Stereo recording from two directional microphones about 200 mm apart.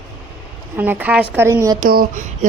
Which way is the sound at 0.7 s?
10° right (ahead or behind).